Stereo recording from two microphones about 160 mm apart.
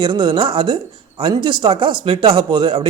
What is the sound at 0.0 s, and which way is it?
A man's voice, 30° right (ahead or behind).